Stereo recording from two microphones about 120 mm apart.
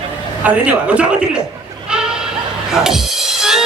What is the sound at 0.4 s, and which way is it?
Speech, 10° right (ahead or behind).